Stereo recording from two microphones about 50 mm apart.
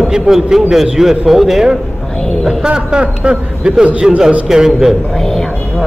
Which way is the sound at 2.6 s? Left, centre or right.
Centre.